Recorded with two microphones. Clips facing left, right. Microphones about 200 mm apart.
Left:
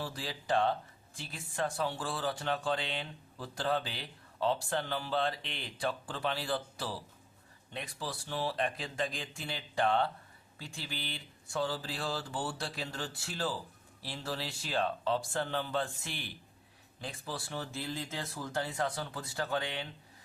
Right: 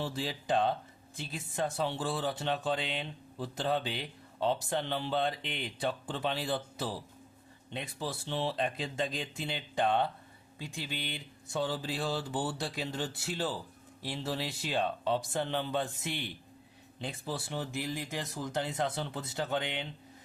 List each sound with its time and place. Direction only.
0.0 s speech: 25° right (ahead or behind)